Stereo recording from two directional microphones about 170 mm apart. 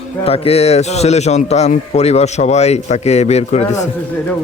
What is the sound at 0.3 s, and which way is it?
A man's voice, 35° left (ahead or behind).